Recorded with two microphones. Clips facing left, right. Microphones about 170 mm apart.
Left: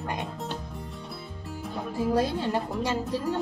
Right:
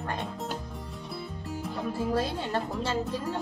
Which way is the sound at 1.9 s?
15° left (ahead or behind).